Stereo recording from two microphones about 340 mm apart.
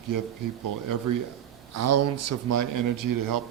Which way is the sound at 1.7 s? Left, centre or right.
Right.